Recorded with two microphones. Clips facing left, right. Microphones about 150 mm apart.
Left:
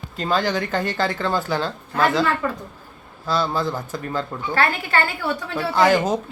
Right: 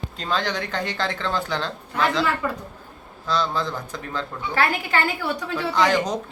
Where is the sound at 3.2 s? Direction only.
5° left (ahead or behind).